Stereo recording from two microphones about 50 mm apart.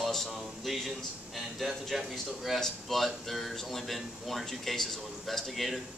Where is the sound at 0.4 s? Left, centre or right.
Centre.